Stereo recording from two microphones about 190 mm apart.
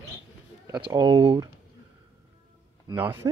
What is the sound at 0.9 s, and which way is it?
Speech, 25° right (ahead or behind).